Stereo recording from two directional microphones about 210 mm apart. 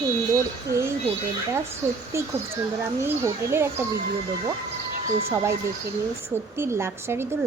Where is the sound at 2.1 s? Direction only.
15° right (ahead or behind).